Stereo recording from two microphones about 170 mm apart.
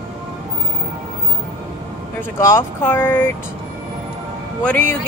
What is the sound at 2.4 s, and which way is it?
Speech, 15° left (ahead or behind).